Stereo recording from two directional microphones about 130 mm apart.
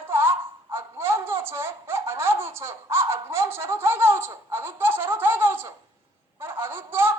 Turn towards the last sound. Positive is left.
turn(degrees=-15)  # may be behind; listen again after turning